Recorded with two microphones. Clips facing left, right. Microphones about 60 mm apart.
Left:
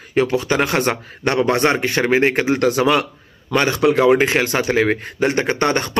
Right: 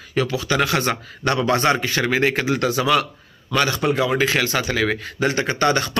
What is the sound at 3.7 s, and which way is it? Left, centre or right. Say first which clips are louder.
Speech: left 6 dB; left.